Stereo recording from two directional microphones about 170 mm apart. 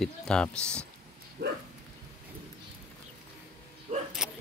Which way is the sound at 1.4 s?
60° right (ahead or behind).